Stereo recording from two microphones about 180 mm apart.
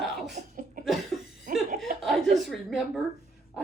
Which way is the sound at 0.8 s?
50° right (ahead or behind).